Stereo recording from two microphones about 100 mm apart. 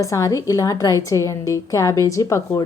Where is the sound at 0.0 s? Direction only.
35° left (ahead or behind).